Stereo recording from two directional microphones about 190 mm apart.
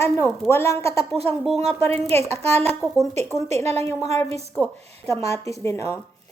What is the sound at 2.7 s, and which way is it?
Speech, centre (ahead or behind).